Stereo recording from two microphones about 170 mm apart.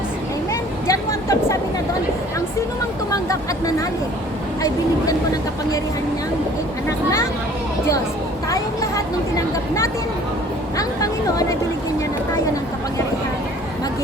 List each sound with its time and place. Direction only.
0.9 s vehicle: 20° left (ahead or behind)
8.4 s speech: 20° left (ahead or behind)
10.8 s speech: 20° left (ahead or behind)